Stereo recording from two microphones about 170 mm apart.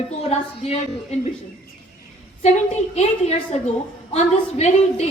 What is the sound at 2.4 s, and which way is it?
A woman's voice, 40° left (ahead or behind).